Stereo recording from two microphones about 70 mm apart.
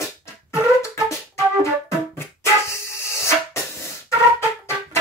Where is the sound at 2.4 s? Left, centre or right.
Left.